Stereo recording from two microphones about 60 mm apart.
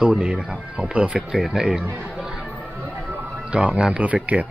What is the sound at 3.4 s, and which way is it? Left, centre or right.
Speech, centre.